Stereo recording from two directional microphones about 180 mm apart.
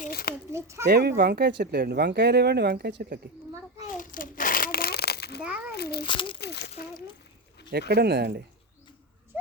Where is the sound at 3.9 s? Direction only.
50° left (ahead or behind).